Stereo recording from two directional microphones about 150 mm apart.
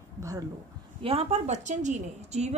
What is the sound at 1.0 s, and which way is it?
A woman's voice, 40° right (ahead or behind).